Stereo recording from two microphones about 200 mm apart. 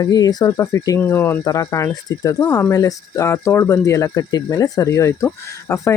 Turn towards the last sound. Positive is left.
turn(degrees=15)  # may be behind; listen again after turning